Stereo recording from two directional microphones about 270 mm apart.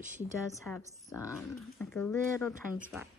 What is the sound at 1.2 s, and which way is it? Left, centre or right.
Speech, centre.